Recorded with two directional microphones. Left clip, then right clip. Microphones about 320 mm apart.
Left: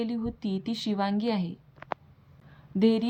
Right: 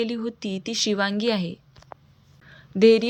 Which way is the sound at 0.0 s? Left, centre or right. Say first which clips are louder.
Right 5 dB; centre.